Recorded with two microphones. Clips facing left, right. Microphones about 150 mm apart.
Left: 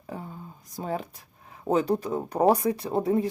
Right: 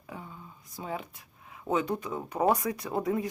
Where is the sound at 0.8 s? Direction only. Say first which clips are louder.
Left 5 dB; 40° left (ahead or behind).